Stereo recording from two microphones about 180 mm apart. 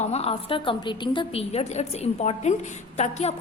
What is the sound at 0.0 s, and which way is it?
A woman's voice, 35° left (ahead or behind).